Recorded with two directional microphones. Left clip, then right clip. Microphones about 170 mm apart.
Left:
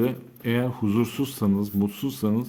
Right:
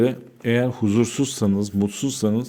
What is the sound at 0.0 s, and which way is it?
Speech, 25° right (ahead or behind).